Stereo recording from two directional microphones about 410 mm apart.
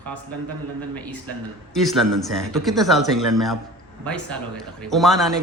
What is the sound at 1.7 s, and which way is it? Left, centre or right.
A man's voice, centre.